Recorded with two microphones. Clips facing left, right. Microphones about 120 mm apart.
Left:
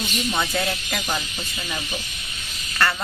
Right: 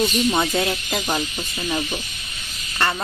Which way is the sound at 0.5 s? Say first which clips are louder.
Right 3 dB; 25° right (ahead or behind).